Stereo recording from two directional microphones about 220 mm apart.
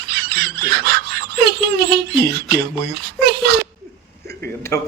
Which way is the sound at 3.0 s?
45° right (ahead or behind).